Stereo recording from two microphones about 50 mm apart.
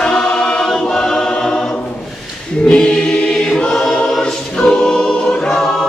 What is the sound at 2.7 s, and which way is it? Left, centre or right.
Choir, centre.